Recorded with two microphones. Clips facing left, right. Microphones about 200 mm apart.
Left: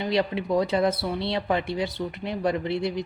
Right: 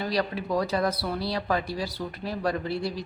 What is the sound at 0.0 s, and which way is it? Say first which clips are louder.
Speech: left 3 dB; 25° left (ahead or behind).